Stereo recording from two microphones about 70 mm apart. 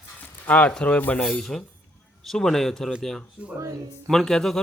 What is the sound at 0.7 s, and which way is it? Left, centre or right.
Speech, centre.